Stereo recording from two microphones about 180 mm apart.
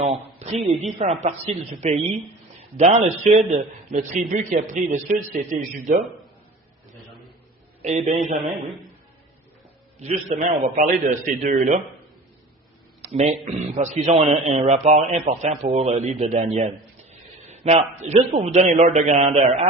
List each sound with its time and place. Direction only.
0.0 s a man's voice: 35° right (ahead or behind)
7.8 s a man's voice: 40° right (ahead or behind)
10.0 s a man's voice: 40° right (ahead or behind)
13.1 s a man's voice: 40° right (ahead or behind)